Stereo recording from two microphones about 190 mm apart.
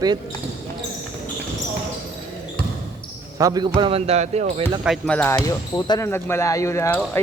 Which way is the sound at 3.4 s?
20° right (ahead or behind).